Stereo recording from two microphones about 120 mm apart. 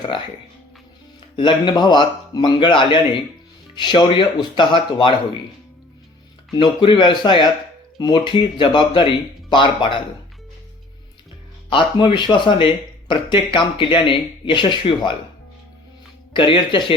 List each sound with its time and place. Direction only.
1.4 s a man's voice: 40° left (ahead or behind)
6.6 s a man's voice: 40° left (ahead or behind)
11.7 s speech: 45° left (ahead or behind)
16.3 s a man's voice: 40° left (ahead or behind)